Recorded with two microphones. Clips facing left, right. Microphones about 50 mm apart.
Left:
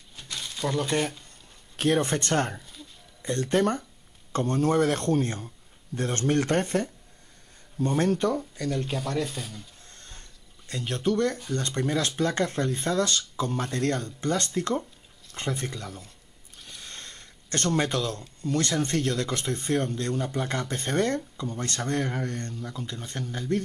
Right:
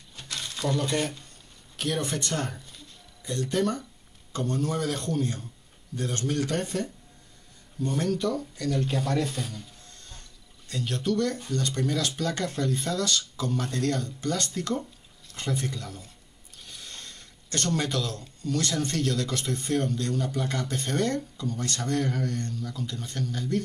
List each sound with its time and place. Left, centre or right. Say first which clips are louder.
0.1 s crumpling: right 1 dB; centre
0.8 s speech: left 1 dB; centre
1.8 s a man's voice: left 5 dB; left
2.6 s a sound: left 2 dB; centre
3.2 s a man's voice: left 3 dB; left
8.1 s speech: left 2 dB; left
8.7 s speech: right 2 dB; centre
9.8 s ratchet: even; left
10.7 s speech: left 1 dB; left
16.8 s a sound: left 2 dB; left
18.4 s speech: left 2 dB; left